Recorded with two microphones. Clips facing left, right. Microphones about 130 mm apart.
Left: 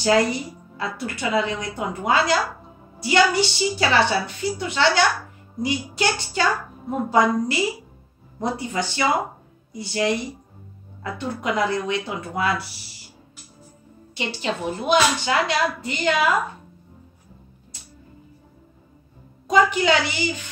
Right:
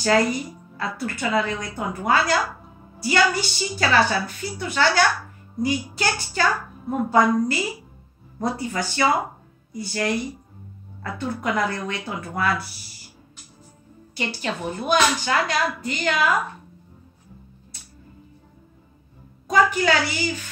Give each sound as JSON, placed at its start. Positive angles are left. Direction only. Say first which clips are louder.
{"t": 0.0, "sound": "a woman's voice", "louder": "left 1 dB", "side_deg": 20}
{"t": 14.1, "sound": "a woman's voice", "louder": "left 1 dB", "side_deg": 25}
{"t": 19.5, "sound": "a woman's voice", "louder": "left 1 dB", "side_deg": 20}